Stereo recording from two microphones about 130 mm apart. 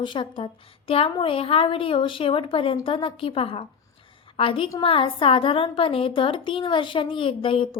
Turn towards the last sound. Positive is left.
turn(degrees=40)  # may be behind; listen again after turning